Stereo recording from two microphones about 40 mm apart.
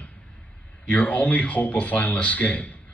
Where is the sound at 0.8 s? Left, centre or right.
Left.